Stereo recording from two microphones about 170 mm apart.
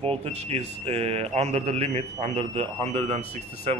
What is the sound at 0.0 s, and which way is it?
Speech, 35° right (ahead or behind).